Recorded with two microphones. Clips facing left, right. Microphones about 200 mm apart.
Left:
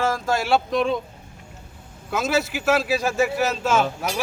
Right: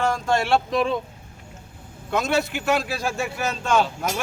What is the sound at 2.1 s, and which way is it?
A man's voice, 5° left (ahead or behind).